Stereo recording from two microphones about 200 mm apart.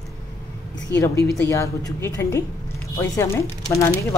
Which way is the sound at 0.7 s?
65° left (ahead or behind).